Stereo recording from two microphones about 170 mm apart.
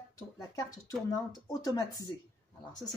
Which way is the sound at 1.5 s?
20° left (ahead or behind).